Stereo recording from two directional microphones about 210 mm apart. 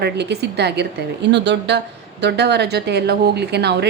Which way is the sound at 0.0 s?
55° right (ahead or behind).